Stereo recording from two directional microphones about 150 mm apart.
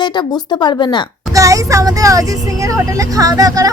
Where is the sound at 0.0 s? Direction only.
30° left (ahead or behind).